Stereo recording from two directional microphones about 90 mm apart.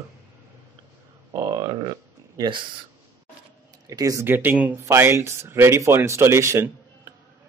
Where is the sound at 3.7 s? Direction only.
40° right (ahead or behind).